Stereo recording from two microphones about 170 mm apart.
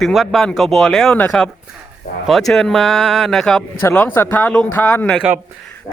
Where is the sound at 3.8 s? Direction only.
10° left (ahead or behind).